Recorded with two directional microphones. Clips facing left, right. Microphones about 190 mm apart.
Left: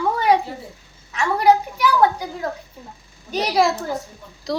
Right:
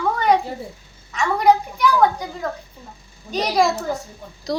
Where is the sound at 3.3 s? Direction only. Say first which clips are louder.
Even; 5° left (ahead or behind).